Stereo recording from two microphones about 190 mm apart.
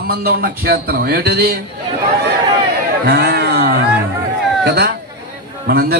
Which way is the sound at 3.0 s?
55° right (ahead or behind).